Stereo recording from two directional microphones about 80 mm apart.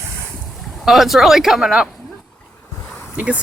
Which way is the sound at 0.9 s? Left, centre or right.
Centre.